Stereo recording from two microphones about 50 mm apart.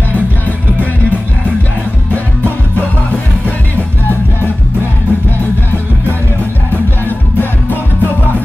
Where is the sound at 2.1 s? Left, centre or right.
Left.